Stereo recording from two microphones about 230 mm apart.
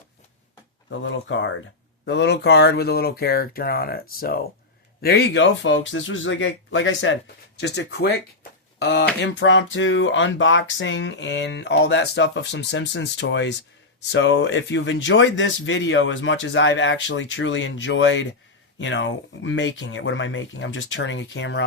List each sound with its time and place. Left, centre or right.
0.9 s a man's voice: left
5.0 s a man's voice: left